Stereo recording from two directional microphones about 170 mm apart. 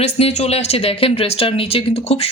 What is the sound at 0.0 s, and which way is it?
Speech, 40° left (ahead or behind).